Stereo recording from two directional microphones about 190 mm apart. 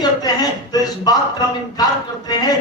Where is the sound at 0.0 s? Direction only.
20° left (ahead or behind).